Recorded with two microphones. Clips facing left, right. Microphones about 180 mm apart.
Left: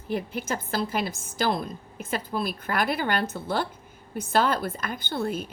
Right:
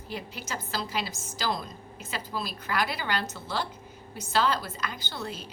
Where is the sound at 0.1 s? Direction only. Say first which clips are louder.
Left 8 dB; 55° left (ahead or behind).